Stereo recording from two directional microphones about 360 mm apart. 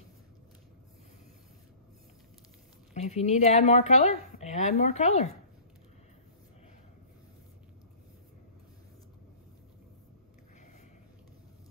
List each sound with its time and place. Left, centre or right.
2.9 s a woman's voice: centre